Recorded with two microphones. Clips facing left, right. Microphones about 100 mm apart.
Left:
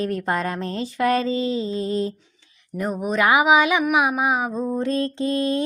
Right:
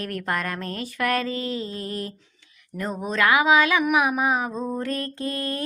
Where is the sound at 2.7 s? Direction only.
15° left (ahead or behind).